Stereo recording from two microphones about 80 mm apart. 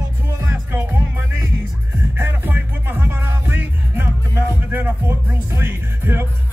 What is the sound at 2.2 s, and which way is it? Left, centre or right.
Music, right.